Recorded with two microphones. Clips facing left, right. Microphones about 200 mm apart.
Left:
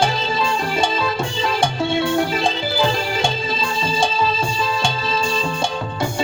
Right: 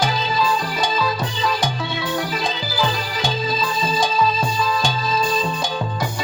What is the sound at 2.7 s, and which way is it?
Music, 25° left (ahead or behind).